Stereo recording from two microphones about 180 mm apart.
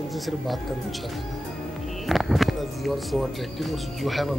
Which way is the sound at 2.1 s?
Centre (ahead or behind).